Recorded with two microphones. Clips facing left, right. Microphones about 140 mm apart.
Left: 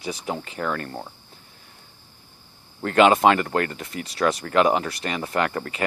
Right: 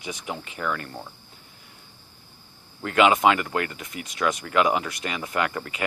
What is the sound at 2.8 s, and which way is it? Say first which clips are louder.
Speech: left 3 dB; 35° left (ahead or behind).